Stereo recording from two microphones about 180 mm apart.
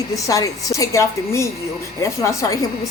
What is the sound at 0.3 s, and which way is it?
A woman's voice, 20° left (ahead or behind).